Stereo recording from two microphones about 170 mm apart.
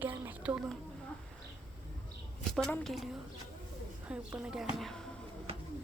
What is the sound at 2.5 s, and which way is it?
Speech, centre (ahead or behind).